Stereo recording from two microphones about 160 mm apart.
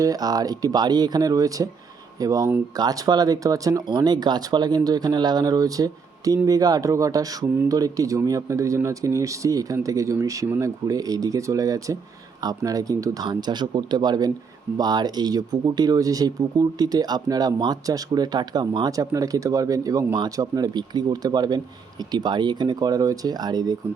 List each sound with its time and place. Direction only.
0.0 s speech: 25° right (ahead or behind)